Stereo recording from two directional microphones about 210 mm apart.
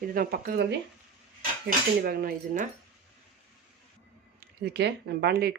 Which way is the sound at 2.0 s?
45° right (ahead or behind).